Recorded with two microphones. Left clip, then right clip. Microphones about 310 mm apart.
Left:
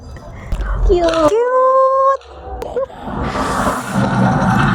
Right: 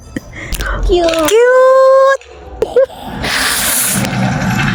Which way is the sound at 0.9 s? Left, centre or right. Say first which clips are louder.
Right 2 dB; centre.